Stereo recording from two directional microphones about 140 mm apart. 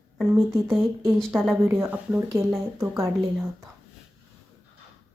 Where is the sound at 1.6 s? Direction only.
15° right (ahead or behind).